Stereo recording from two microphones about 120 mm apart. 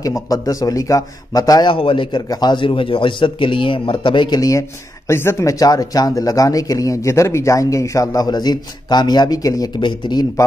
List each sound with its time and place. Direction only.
0.0 s a man's voice: 30° left (ahead or behind)
1.7 s a man's voice: 45° left (ahead or behind)
2.2 s speech: 35° left (ahead or behind)